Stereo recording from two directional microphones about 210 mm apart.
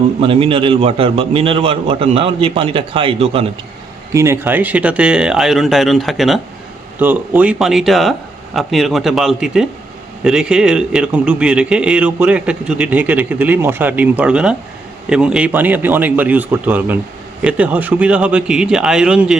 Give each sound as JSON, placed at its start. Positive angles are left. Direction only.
{"t": 0.2, "sound": "a man's voice", "side_deg": -25}
{"t": 4.1, "sound": "a man's voice", "side_deg": -15}